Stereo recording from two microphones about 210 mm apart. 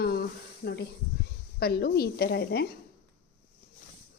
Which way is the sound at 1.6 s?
50° left (ahead or behind).